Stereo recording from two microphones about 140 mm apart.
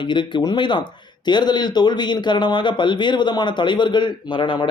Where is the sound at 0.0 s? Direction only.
35° left (ahead or behind).